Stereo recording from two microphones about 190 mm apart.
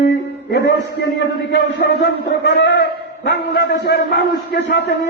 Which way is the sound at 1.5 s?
60° left (ahead or behind).